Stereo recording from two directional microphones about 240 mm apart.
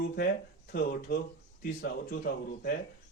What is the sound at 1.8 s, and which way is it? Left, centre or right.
Speech, left.